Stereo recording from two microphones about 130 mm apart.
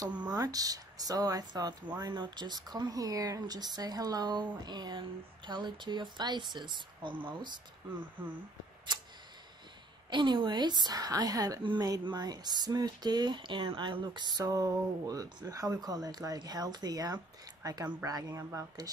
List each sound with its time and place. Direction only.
0.3 s a woman's voice: 30° right (ahead or behind)
10.0 s a woman's voice: 35° right (ahead or behind)